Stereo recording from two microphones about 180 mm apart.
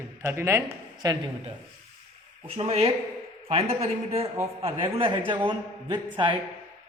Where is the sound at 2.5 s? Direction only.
35° right (ahead or behind).